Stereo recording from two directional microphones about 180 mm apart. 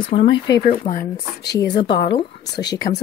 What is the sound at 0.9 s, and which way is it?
Speech, 40° left (ahead or behind).